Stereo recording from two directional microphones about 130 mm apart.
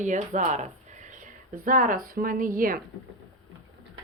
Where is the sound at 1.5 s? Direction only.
90° right.